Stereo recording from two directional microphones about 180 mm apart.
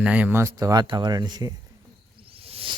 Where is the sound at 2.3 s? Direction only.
30° right (ahead or behind).